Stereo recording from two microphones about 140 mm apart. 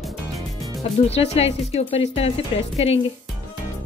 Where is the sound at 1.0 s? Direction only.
50° left (ahead or behind).